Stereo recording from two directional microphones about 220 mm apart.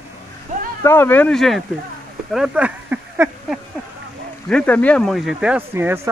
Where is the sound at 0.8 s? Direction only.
10° left (ahead or behind); by 3.5 s 5° right (ahead or behind).